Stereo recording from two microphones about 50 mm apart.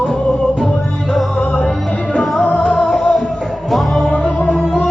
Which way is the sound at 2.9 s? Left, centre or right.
Centre.